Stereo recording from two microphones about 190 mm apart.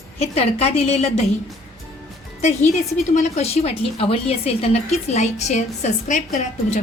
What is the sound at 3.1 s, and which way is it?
A woman's voice, 35° left (ahead or behind).